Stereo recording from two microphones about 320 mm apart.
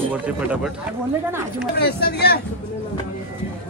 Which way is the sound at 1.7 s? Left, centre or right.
Left.